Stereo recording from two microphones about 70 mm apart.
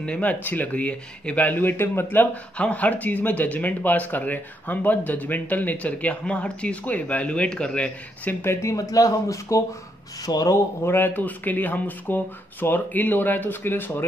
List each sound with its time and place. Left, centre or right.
0.0 s speech: centre
2.5 s speech: centre
8.5 s speech: left
10.2 s speech: left
10.8 s speech: left